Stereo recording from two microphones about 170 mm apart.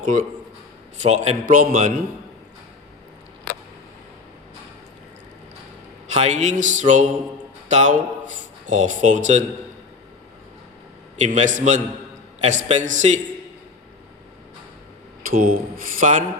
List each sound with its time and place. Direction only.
0.0 s a man's voice: 50° right (ahead or behind)
6.1 s speech: 45° right (ahead or behind)
11.2 s speech: 45° right (ahead or behind)
15.3 s speech: 60° right (ahead or behind)